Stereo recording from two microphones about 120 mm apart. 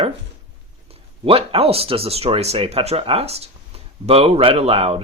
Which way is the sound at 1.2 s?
55° right (ahead or behind).